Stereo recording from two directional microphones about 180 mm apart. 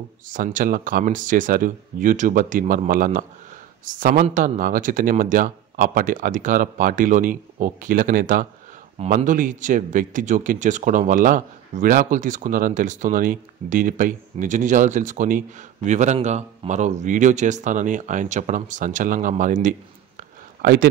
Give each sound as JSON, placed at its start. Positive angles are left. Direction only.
{"t": 0.3, "sound": "speech", "side_deg": -50}
{"t": 8.9, "sound": "speech", "side_deg": -40}